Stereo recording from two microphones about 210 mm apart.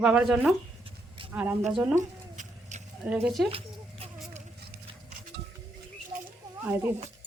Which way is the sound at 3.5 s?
30° right (ahead or behind).